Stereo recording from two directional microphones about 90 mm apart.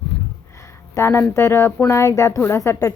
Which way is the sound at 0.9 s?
30° left (ahead or behind).